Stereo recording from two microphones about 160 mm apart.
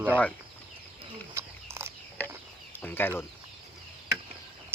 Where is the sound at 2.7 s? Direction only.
15° left (ahead or behind).